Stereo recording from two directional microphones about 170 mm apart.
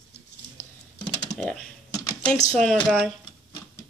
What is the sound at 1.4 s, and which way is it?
Speech, 5° left (ahead or behind).